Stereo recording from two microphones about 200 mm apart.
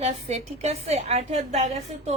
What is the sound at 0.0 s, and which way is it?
A woman's voice, 35° right (ahead or behind).